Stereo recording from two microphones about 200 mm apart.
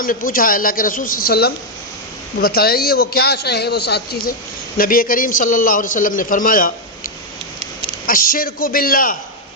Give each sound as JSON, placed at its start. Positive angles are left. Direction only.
{"t": 0.0, "sound": "a man's voice", "side_deg": 45}
{"t": 8.0, "sound": "a man's voice", "side_deg": 45}